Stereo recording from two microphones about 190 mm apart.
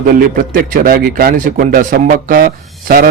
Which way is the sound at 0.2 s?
50° right (ahead or behind).